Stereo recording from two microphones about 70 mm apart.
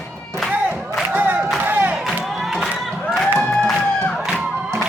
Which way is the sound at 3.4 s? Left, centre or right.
Centre.